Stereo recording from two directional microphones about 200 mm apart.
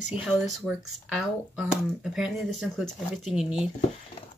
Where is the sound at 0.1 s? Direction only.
5° right (ahead or behind).